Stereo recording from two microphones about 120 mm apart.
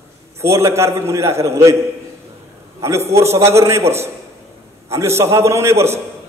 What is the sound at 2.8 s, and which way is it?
A man's voice, 25° right (ahead or behind).